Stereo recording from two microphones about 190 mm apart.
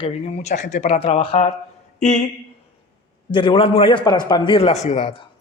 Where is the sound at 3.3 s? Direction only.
25° left (ahead or behind).